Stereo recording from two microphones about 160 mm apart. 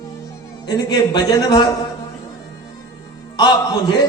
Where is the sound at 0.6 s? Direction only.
25° left (ahead or behind).